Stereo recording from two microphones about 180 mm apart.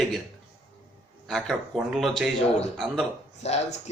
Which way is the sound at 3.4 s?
40° left (ahead or behind).